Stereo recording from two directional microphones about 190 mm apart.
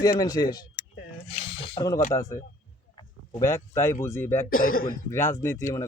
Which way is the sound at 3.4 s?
15° left (ahead or behind).